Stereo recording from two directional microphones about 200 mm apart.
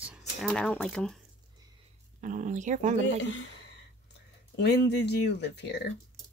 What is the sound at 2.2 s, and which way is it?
Speech, 40° right (ahead or behind).